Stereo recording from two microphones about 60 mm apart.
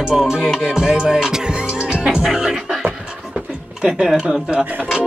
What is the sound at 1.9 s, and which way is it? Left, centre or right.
Music, centre.